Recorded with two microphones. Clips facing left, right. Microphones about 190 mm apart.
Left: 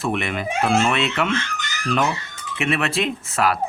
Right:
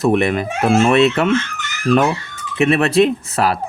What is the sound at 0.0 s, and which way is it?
Speech, 40° right (ahead or behind).